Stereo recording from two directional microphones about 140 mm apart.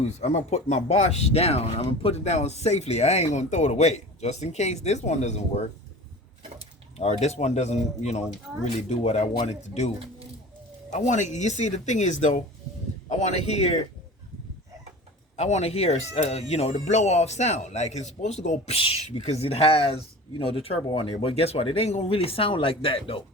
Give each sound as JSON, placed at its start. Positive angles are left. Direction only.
{"t": 0.0, "sound": "speech", "side_deg": 55}
{"t": 6.9, "sound": "a man's voice", "side_deg": 50}
{"t": 15.4, "sound": "speech", "side_deg": 50}